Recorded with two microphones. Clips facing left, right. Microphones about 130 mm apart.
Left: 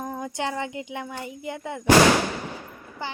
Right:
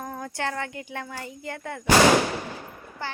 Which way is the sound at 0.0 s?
15° left (ahead or behind).